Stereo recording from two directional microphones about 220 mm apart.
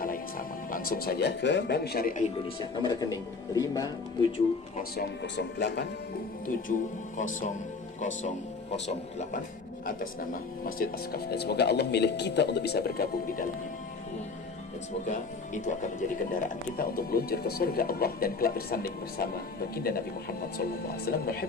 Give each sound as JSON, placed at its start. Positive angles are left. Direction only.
{"t": 0.0, "sound": "speech", "side_deg": 40}
{"t": 2.4, "sound": "speech", "side_deg": 20}
{"t": 4.8, "sound": "speech", "side_deg": 50}
{"t": 6.7, "sound": "speech", "side_deg": 35}
{"t": 8.7, "sound": "speech", "side_deg": 30}
{"t": 10.8, "sound": "speech", "side_deg": 45}
{"t": 15.0, "sound": "speech", "side_deg": 35}